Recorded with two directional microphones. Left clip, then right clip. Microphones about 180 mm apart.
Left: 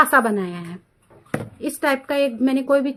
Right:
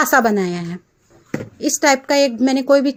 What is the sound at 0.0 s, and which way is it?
A woman's voice, 35° right (ahead or behind).